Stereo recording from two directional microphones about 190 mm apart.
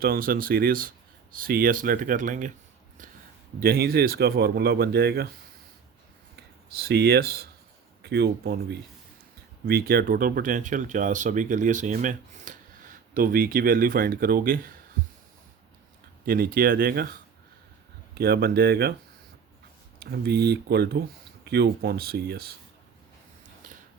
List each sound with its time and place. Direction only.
0.0 s speech: 50° right (ahead or behind)
3.6 s speech: 50° right (ahead or behind)
6.8 s speech: 55° right (ahead or behind)
16.2 s speech: 50° right (ahead or behind)
18.2 s speech: 55° right (ahead or behind)
20.0 s speech: 55° right (ahead or behind)
23.6 s a sound: 45° right (ahead or behind)